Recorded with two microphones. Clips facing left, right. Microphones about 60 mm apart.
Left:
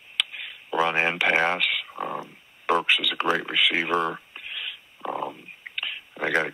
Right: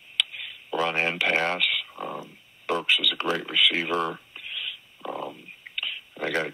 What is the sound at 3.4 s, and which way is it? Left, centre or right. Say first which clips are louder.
Speech: left 1 dB; left.